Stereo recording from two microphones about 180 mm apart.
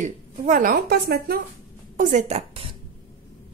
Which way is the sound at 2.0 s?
40° right (ahead or behind).